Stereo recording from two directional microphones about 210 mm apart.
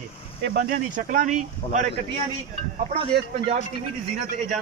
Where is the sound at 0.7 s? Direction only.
40° right (ahead or behind).